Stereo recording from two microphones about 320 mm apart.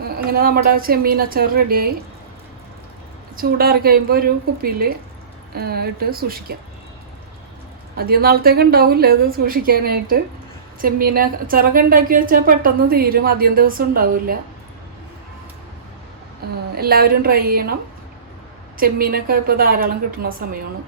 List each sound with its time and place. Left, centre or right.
0.3 s a woman's voice: right
3.3 s a woman's voice: right
7.9 s a woman's voice: right
16.4 s a sound: right
16.7 s a woman's voice: right
18.8 s a woman's voice: right